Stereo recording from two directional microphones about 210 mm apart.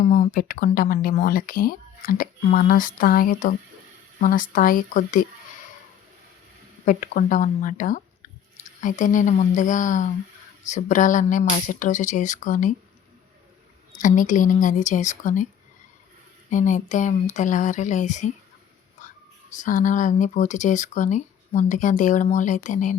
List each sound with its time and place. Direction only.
0.0 s speech: 40° left (ahead or behind)
6.8 s speech: 40° left (ahead or behind)
14.0 s speech: 40° left (ahead or behind)
16.5 s speech: 35° left (ahead or behind)
19.0 s whispering: 35° left (ahead or behind)
19.5 s speech: 35° left (ahead or behind)